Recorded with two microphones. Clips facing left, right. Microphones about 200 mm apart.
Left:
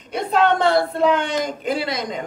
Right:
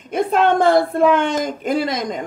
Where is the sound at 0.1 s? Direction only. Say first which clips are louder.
Right 2 dB; 50° right (ahead or behind).